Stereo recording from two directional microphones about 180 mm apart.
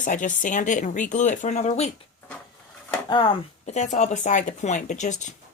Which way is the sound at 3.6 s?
40° left (ahead or behind).